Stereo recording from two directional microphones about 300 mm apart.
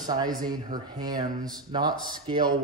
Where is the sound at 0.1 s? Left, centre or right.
Centre.